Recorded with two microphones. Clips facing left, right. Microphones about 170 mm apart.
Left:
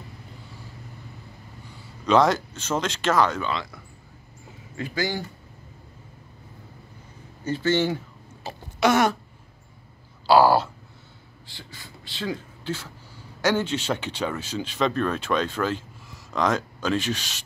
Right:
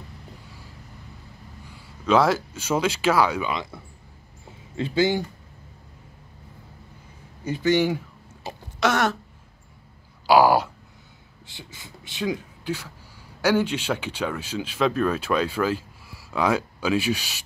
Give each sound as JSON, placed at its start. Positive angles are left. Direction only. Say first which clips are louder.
{"t": 2.0, "sound": "speech", "louder": "even", "side_deg": -5}
{"t": 4.7, "sound": "speech", "louder": "right 6 dB", "side_deg": -25}
{"t": 7.4, "sound": "speech", "louder": "right 2 dB", "side_deg": -15}
{"t": 8.7, "sound": "throat clearing", "louder": "left 2 dB", "side_deg": 0}
{"t": 10.2, "sound": "a sound", "louder": "even", "side_deg": -15}
{"t": 11.4, "sound": "speech", "louder": "right 1 dB", "side_deg": -20}